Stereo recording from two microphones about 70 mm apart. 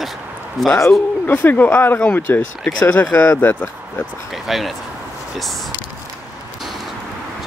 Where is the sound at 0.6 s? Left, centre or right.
Centre.